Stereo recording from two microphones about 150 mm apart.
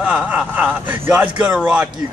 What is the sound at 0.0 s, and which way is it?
Speech, 10° right (ahead or behind).